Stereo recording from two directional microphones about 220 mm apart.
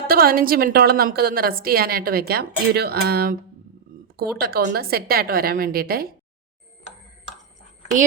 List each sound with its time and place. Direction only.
0.1 s a woman's voice: 45° right (ahead or behind)
4.4 s a woman's voice: 45° right (ahead or behind)